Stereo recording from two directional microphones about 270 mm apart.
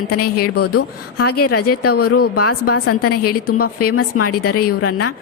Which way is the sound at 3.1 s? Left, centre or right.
Left.